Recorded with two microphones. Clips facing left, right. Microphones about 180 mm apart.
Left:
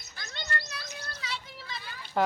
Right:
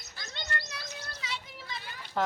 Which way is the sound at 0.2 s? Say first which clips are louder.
Left 2 dB; 20° right (ahead or behind).